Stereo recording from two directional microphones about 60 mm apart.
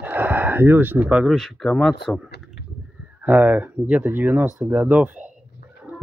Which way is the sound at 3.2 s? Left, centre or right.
Right.